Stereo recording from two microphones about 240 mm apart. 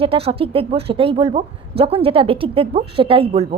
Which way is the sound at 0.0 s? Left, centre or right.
Right.